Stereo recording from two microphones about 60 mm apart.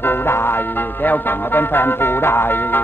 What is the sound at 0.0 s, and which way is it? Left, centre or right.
Music, left.